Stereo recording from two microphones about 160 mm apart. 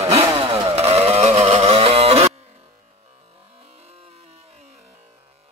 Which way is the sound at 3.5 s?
40° right (ahead or behind).